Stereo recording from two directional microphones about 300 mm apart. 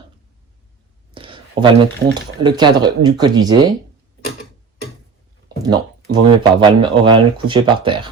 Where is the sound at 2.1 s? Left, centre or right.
Centre.